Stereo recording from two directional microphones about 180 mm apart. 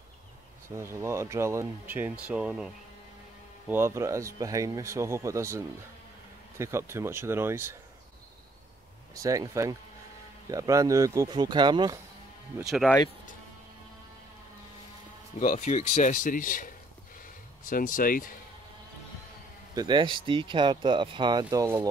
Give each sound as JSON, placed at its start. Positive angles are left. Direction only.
{"t": 0.7, "sound": "speech", "side_deg": -15}
{"t": 6.6, "sound": "speech", "side_deg": -15}
{"t": 9.1, "sound": "speech", "side_deg": -20}
{"t": 12.5, "sound": "speech", "side_deg": -5}
{"t": 15.3, "sound": "a man's voice", "side_deg": 45}
{"t": 19.7, "sound": "speech", "side_deg": -25}